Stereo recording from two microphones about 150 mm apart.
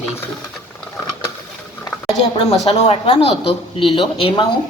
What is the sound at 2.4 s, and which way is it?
A woman's voice, 40° left (ahead or behind).